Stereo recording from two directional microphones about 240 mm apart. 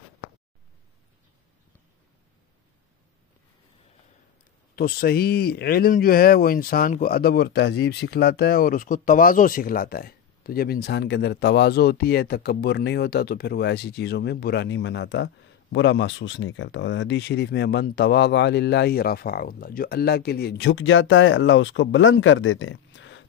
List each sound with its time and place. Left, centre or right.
4.7 s speech: left